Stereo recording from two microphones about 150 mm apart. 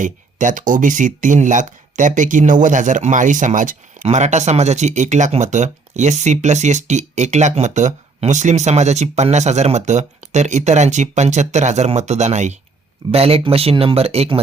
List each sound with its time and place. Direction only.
0.0 s speech: 60° right (ahead or behind); by 14.4 s 40° right (ahead or behind)